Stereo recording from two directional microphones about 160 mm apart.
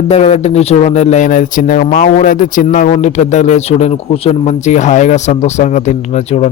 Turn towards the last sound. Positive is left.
turn(degrees=45)  # may be behind; listen again after turning